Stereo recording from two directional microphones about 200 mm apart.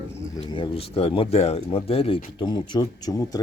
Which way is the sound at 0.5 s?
25° left (ahead or behind).